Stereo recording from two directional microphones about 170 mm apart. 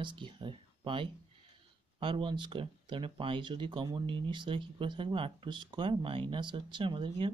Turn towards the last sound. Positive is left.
turn(degrees=-30)  # may be behind; listen again after turning